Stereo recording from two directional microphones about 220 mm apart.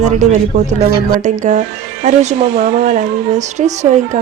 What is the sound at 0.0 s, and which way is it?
Speech, 35° right (ahead or behind).